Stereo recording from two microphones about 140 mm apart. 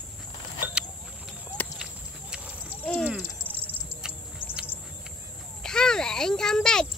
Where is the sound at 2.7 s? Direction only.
10° left (ahead or behind).